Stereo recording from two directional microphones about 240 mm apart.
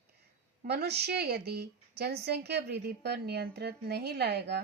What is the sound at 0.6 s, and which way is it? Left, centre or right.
A woman's voice, right.